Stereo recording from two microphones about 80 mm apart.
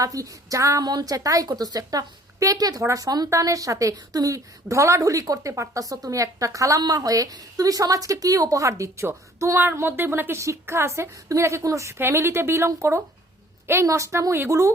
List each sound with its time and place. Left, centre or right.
0.0 s a woman's voice: right
0.9 s a woman's voice: right